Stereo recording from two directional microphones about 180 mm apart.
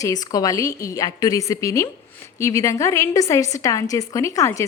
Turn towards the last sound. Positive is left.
turn(degrees=15)  # may be behind; listen again after turning